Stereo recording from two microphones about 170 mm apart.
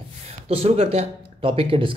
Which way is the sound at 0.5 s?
35° right (ahead or behind).